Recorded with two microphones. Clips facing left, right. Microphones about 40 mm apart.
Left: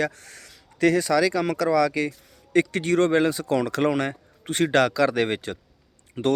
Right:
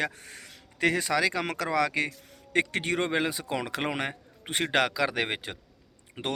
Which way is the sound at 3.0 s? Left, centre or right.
Centre.